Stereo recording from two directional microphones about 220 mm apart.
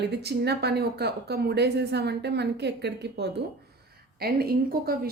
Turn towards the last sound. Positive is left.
turn(degrees=-45)  # may be behind; listen again after turning